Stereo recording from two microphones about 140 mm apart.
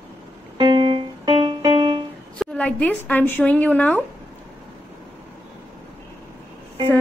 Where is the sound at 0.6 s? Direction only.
35° right (ahead or behind).